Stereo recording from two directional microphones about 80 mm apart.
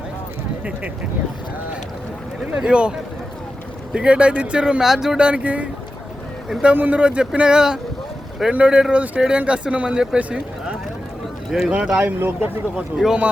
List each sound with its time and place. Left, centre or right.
2.6 s speech: centre
3.9 s speech: centre
11.5 s speech: centre
12.0 s speech: right
12.7 s speech: centre